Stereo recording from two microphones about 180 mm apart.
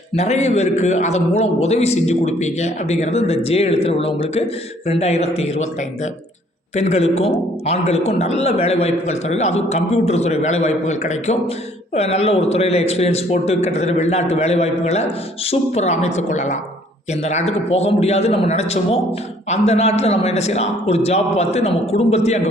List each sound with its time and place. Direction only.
0.2 s a woman's voice: 40° left (ahead or behind)
6.7 s a woman's voice: 35° left (ahead or behind)